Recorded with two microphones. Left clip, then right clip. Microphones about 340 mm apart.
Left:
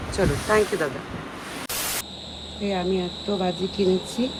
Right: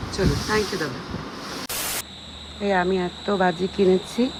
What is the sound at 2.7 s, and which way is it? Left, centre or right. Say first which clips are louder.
Speech: right 4 dB; centre.